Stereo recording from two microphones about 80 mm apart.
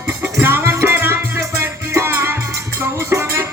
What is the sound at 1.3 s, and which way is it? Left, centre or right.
Music, right.